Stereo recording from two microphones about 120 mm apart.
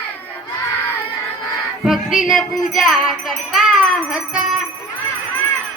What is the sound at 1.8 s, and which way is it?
Music, 5° right (ahead or behind).